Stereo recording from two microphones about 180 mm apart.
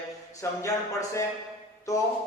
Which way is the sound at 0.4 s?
15° left (ahead or behind).